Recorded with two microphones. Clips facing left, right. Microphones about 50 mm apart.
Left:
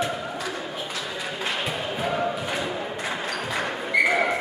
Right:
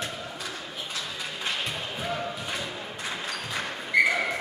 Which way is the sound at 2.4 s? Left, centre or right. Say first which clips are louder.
Left 6 dB; centre.